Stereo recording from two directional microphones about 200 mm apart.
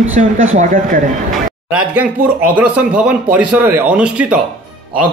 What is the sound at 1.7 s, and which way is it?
Speech, 10° right (ahead or behind).